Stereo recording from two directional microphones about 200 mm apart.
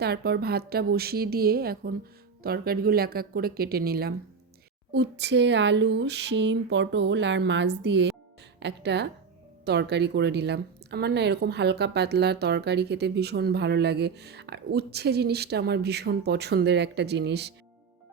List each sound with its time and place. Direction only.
0.0 s a woman's voice: 55° right (ahead or behind)